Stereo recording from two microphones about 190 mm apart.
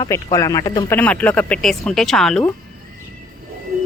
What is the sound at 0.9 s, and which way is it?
Speech, 10° left (ahead or behind).